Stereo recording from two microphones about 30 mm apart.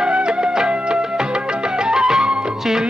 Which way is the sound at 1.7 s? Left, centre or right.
Right.